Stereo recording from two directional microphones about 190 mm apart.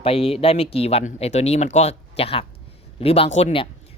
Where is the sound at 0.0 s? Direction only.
30° left (ahead or behind).